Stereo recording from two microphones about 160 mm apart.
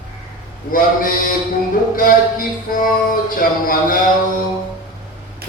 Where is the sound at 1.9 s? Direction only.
60° left (ahead or behind).